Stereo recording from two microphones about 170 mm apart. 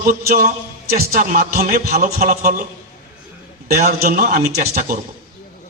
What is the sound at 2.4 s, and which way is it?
Speech, 60° right (ahead or behind).